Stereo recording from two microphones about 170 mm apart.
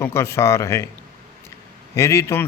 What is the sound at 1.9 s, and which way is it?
Speech, 15° left (ahead or behind).